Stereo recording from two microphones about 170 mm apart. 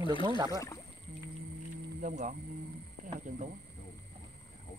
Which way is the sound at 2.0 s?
50° right (ahead or behind).